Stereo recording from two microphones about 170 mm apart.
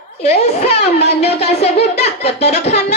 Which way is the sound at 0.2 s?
35° left (ahead or behind).